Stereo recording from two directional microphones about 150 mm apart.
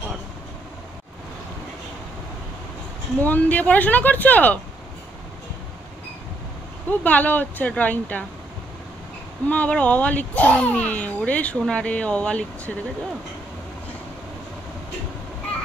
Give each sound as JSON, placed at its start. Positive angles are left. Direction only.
{"t": 3.2, "sound": "speech", "side_deg": 10}
{"t": 6.9, "sound": "speech", "side_deg": 10}
{"t": 9.5, "sound": "speech", "side_deg": 10}